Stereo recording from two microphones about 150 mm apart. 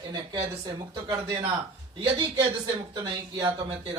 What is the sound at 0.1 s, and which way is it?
A man's voice, 20° right (ahead or behind).